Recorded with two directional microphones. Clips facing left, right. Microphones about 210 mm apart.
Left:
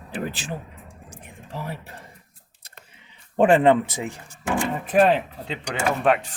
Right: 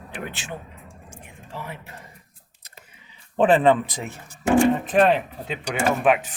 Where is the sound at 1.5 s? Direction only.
35° left (ahead or behind).